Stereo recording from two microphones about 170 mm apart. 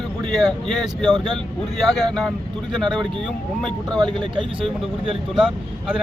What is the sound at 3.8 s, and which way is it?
Speech, 25° right (ahead or behind).